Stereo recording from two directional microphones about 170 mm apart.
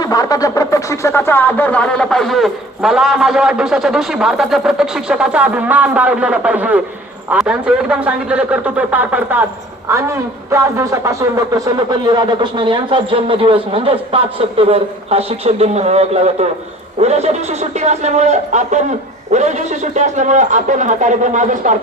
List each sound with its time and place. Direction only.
0.0 s a man's voice: 20° left (ahead or behind); by 21.8 s 50° right (ahead or behind)